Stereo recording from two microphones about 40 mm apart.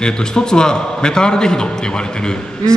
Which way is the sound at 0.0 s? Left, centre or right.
Centre.